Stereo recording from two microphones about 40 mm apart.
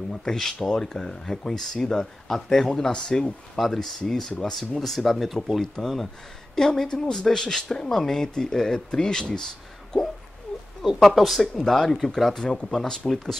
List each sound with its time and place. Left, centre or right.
0.1 s speech: centre
3.5 s speech: centre
10.8 s speech: centre